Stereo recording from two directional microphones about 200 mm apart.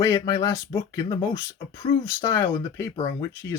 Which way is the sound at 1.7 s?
25° left (ahead or behind).